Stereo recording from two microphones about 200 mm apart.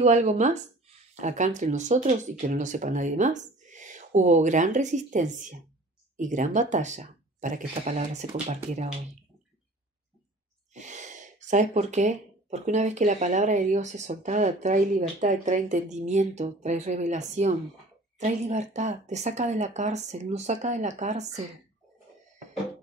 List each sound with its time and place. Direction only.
0.0 s speech: 35° right (ahead or behind)
10.7 s speech: 35° right (ahead or behind)